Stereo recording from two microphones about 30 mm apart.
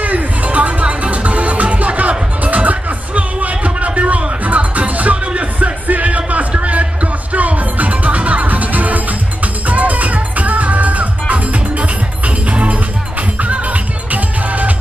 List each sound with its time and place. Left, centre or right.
0.0 s music: right
7.3 s music: right
12.4 s music: right
14.1 s music: right